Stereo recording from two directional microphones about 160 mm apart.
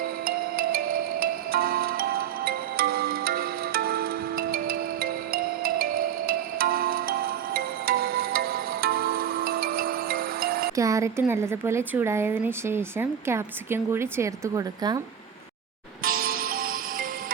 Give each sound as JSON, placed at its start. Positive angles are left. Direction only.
{"t": 0.3, "sound": "music", "side_deg": -70}
{"t": 10.8, "sound": "speech", "side_deg": -20}
{"t": 16.0, "sound": "music", "side_deg": -65}